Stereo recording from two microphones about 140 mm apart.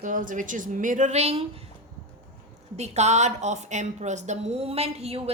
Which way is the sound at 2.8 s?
55° right (ahead or behind).